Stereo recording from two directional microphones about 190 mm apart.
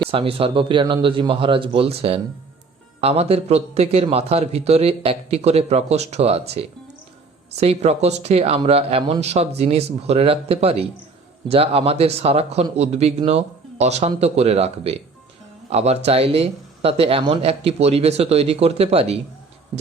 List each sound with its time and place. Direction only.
0.1 s a man's voice: 30° right (ahead or behind)